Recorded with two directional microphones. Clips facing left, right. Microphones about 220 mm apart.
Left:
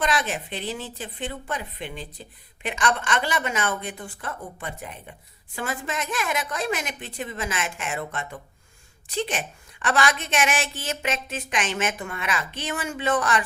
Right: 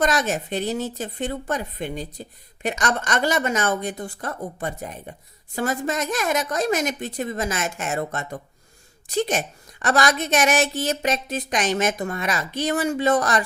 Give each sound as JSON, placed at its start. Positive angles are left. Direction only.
{"t": 0.0, "sound": "a woman's voice", "side_deg": -45}